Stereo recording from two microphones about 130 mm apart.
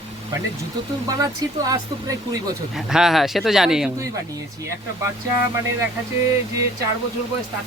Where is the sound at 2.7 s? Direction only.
5° right (ahead or behind).